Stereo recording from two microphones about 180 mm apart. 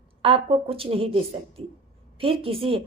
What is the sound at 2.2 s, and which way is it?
Speech, 30° right (ahead or behind).